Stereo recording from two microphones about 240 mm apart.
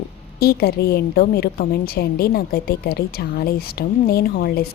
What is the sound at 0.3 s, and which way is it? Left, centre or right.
A woman's voice, left.